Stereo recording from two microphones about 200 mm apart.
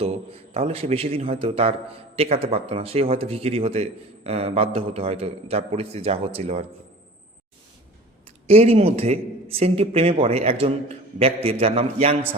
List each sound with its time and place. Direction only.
0.0 s speech: 30° right (ahead or behind)
8.4 s speech: 30° right (ahead or behind)